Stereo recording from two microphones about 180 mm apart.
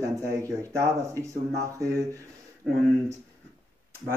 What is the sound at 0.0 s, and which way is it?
Speech, 15° right (ahead or behind).